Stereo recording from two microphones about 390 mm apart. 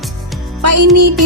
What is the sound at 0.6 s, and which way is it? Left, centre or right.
Speech, right.